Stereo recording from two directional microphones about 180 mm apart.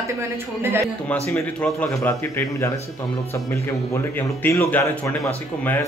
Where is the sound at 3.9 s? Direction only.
15° left (ahead or behind).